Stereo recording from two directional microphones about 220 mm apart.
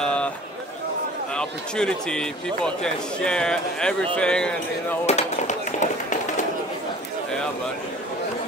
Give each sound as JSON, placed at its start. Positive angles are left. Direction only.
{"t": 0.0, "sound": "a sound", "side_deg": 5}
{"t": 1.3, "sound": "a man's voice", "side_deg": 5}
{"t": 5.0, "sound": "speech", "side_deg": 30}